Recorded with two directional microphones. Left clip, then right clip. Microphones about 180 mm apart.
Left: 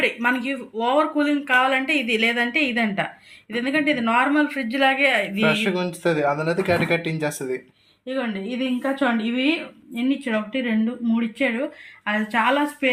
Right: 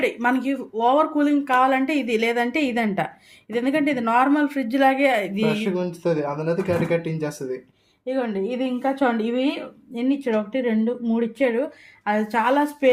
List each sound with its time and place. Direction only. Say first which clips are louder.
0.0 s speech: even; 75° right (ahead or behind)
5.5 s speech: left 3 dB; centre (ahead or behind)
8.0 s speech: right 3 dB; 80° right